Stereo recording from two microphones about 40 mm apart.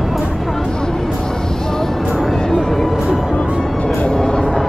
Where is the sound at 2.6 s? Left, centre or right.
Centre.